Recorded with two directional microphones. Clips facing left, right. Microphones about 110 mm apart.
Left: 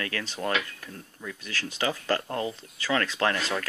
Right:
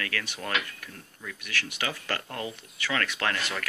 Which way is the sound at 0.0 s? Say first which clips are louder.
Left 3 dB; 30° left (ahead or behind).